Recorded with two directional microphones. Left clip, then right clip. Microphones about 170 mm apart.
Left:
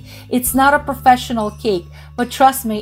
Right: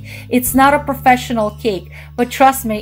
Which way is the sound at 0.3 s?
25° left (ahead or behind).